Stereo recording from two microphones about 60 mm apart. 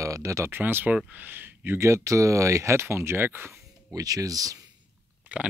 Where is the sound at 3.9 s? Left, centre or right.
Right.